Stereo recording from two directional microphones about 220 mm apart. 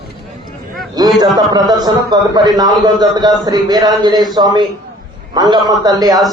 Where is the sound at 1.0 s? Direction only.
15° right (ahead or behind).